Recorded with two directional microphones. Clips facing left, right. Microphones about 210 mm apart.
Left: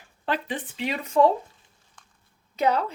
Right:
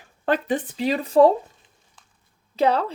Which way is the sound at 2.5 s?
30° right (ahead or behind).